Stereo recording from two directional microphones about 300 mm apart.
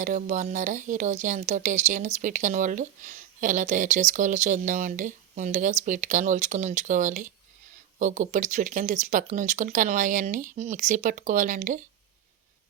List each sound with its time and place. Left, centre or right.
0.0 s a woman's voice: right